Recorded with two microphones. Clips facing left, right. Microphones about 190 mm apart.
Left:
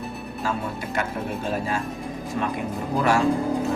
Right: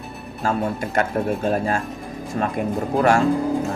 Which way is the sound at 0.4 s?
45° right (ahead or behind).